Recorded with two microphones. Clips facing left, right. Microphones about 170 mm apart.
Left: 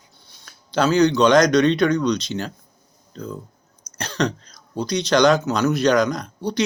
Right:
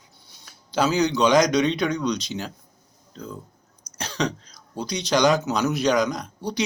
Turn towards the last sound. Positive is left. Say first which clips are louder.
# left 4 dB
turn(degrees=-10)  # may be behind; listen again after turning